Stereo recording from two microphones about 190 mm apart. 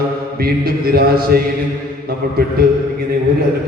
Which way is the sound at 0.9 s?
55° right (ahead or behind).